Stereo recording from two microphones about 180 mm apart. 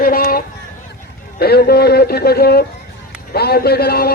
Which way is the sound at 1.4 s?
60° left (ahead or behind).